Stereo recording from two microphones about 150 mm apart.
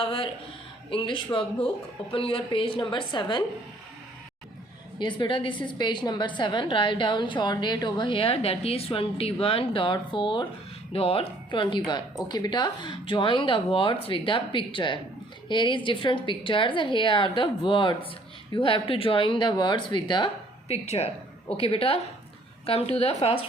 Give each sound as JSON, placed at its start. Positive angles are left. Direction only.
{"t": 0.0, "sound": "a woman's voice", "side_deg": 40}
{"t": 4.9, "sound": "a woman's voice", "side_deg": 30}
{"t": 20.7, "sound": "a woman's voice", "side_deg": 45}